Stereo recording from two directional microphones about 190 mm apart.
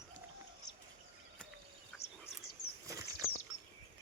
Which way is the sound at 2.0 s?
35° left (ahead or behind).